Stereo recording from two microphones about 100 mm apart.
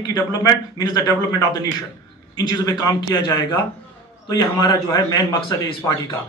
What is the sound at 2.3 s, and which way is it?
A man's voice, 40° left (ahead or behind).